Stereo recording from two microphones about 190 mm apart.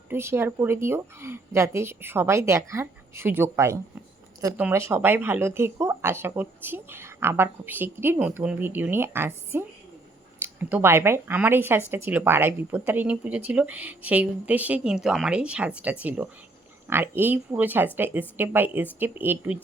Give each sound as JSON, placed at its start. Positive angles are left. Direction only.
{"t": 0.1, "sound": "speech", "side_deg": -15}